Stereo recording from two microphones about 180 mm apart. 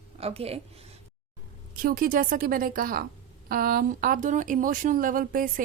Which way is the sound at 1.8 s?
55° right (ahead or behind).